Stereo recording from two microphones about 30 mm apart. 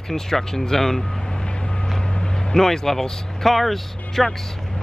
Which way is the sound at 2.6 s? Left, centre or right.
Centre.